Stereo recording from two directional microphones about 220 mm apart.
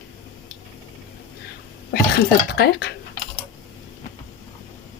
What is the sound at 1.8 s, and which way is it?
Speech, 45° left (ahead or behind).